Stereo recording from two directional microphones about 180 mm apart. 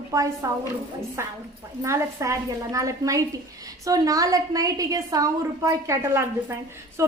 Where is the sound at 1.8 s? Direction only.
15° right (ahead or behind).